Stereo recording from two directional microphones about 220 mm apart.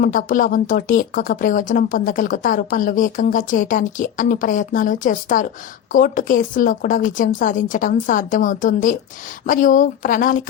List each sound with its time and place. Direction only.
0.0 s speech: 40° left (ahead or behind)